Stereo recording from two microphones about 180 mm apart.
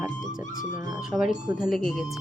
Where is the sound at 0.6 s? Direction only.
45° left (ahead or behind).